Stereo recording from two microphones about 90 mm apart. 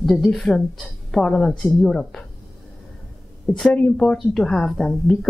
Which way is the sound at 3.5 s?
20° left (ahead or behind).